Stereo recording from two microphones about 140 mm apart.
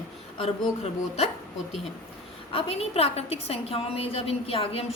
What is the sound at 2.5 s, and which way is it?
A woman's voice, 45° left (ahead or behind).